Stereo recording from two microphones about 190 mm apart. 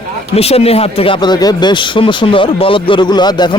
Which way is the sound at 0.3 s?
30° left (ahead or behind).